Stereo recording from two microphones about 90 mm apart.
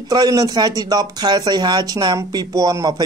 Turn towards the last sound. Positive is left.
turn(degrees=-50)  # may be behind; listen again after turning